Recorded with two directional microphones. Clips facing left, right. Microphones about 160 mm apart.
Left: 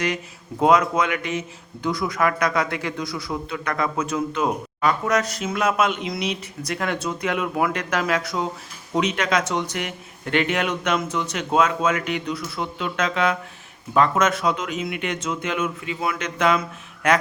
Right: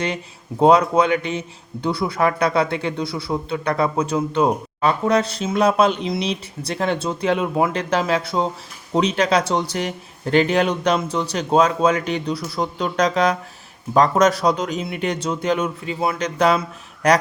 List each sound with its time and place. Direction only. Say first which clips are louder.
0.6 s a man's voice: right 4 dB; 30° right (ahead or behind)